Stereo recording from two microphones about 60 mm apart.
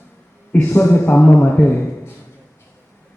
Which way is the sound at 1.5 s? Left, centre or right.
Left.